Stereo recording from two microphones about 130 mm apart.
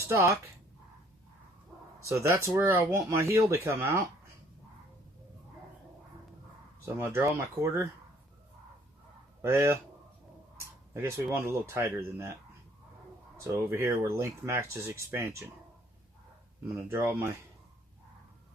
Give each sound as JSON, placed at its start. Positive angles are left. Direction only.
{"t": 0.0, "sound": "speech", "side_deg": -20}
{"t": 2.0, "sound": "speech", "side_deg": -20}
{"t": 6.8, "sound": "speech", "side_deg": -20}
{"t": 9.4, "sound": "speech", "side_deg": -20}
{"t": 16.7, "sound": "speech", "side_deg": -20}